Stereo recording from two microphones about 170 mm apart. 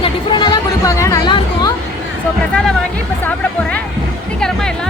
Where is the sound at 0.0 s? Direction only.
30° left (ahead or behind).